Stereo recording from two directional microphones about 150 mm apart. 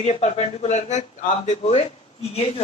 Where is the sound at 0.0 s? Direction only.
45° left (ahead or behind).